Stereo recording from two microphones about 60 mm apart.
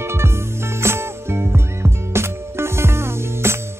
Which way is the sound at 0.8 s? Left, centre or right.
Right.